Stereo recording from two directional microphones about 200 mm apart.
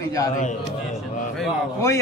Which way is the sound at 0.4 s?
40° left (ahead or behind).